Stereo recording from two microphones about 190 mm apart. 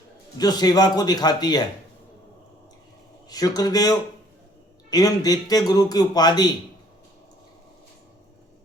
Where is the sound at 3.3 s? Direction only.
20° left (ahead or behind).